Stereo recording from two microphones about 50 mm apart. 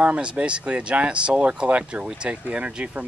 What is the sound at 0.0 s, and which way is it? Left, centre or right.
Speech, right.